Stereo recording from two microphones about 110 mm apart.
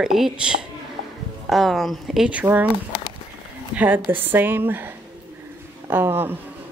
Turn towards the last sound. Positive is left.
turn(degrees=-20)  # may be behind; listen again after turning